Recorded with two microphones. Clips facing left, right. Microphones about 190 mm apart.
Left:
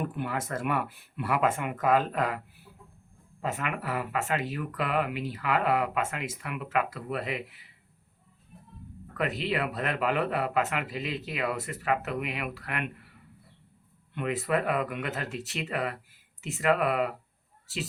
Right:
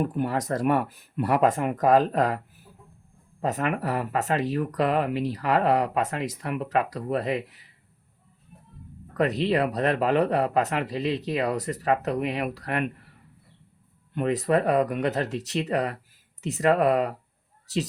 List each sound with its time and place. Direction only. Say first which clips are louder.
0.0 s speech: right 6 dB; 40° right (ahead or behind)
9.1 s speech: right 7 dB; 40° right (ahead or behind)
14.1 s speech: right 6 dB; 40° right (ahead or behind)